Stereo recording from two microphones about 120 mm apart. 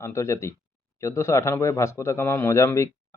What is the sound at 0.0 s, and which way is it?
Speech, 25° left (ahead or behind).